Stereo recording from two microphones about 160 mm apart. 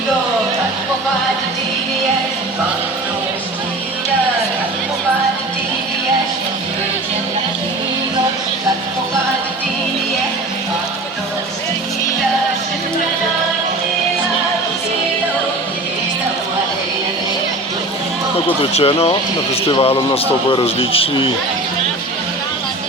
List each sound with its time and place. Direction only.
18.6 s speech: 35° left (ahead or behind)